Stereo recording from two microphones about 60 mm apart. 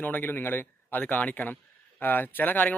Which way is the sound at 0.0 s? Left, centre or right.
Left.